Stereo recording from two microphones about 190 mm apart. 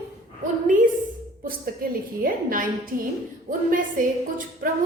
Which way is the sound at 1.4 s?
50° right (ahead or behind).